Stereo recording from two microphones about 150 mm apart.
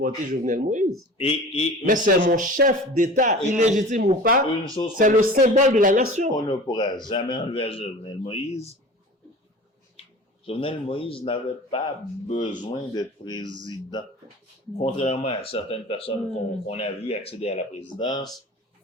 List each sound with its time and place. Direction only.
0.0 s speech: 60° right (ahead or behind)
1.2 s speech: 40° left (ahead or behind)
1.9 s speech: 60° right (ahead or behind)
6.3 s speech: 30° left (ahead or behind); by 8.7 s 45° left (ahead or behind)
10.0 s speech: 40° left (ahead or behind)
12.5 s speech: 30° left (ahead or behind)
14.8 s speech: 50° left (ahead or behind)
18.0 s speech: 25° left (ahead or behind)